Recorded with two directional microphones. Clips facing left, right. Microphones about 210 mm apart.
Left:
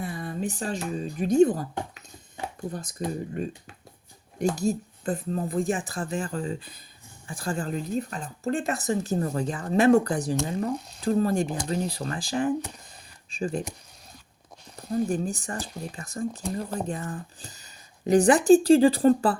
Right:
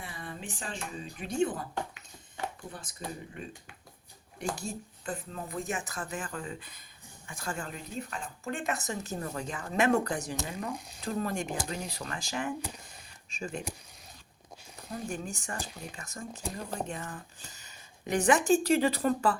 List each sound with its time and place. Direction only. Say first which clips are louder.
0.0 s speech: left 11 dB; 40° left (ahead or behind)
4.5 s speech: left 12 dB; 40° left (ahead or behind)
14.8 s a sound: left 9 dB; 35° left (ahead or behind)
15.1 s speech: left 8 dB; 35° left (ahead or behind)